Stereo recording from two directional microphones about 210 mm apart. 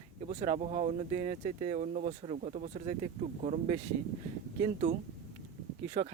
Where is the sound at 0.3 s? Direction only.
35° right (ahead or behind).